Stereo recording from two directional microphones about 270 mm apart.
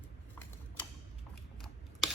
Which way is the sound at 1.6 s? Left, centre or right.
Centre.